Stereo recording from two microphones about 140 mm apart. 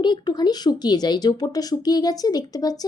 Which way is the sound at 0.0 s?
30° left (ahead or behind).